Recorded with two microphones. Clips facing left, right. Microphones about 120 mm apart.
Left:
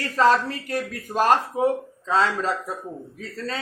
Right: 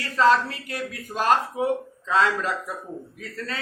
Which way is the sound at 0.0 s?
40° left (ahead or behind).